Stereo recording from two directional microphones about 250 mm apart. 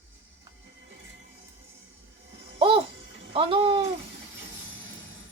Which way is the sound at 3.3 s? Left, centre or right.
Right.